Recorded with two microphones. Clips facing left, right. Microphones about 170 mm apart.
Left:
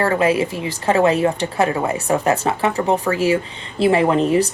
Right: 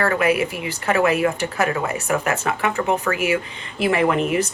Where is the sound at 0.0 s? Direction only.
30° left (ahead or behind).